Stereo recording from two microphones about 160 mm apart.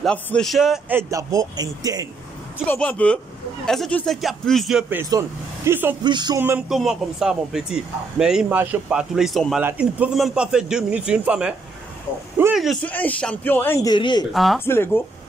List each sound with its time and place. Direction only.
0.0 s a man's voice: 5° left (ahead or behind)
0.9 s a man's voice: 20° right (ahead or behind)
2.6 s a man's voice: 10° left (ahead or behind); by 5.9 s 15° right (ahead or behind)
6.0 s a man's voice: 25° right (ahead or behind)
6.7 s a man's voice: centre (ahead or behind)
12.8 s speech: 10° left (ahead or behind)
13.8 s speech: 30° left (ahead or behind)
14.3 s a man's voice: centre (ahead or behind)
14.6 s speech: 15° left (ahead or behind)